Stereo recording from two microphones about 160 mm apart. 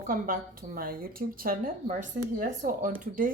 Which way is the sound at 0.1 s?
60° right (ahead or behind).